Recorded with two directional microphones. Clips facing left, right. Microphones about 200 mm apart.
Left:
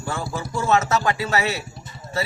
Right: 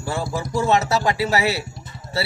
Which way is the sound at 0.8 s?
35° right (ahead or behind).